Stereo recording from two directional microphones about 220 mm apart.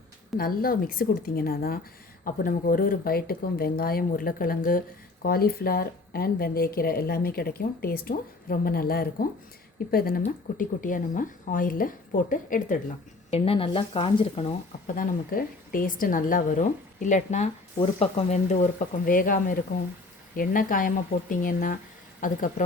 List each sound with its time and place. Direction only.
0.3 s a woman's voice: 40° left (ahead or behind)
13.3 s speech: 25° left (ahead or behind)
14.9 s a woman's voice: 40° left (ahead or behind)